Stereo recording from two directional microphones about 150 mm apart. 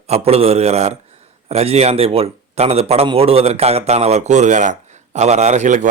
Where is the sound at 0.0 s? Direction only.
45° right (ahead or behind).